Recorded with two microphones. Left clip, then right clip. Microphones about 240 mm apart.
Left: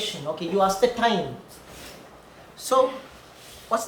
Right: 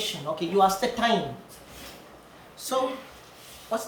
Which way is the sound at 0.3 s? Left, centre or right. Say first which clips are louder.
Even; centre.